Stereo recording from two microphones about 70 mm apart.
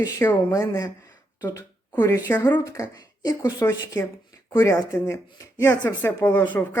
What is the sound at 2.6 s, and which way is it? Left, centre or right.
Speech, left.